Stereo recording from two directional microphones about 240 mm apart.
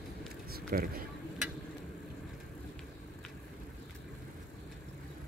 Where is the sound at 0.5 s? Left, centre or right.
Right.